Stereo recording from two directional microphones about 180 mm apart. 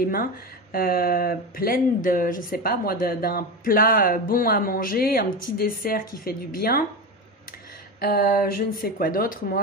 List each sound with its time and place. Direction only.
0.0 s speech: 55° left (ahead or behind)
8.0 s speech: 55° left (ahead or behind)